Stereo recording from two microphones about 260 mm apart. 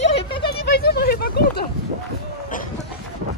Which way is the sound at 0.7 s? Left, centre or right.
Left.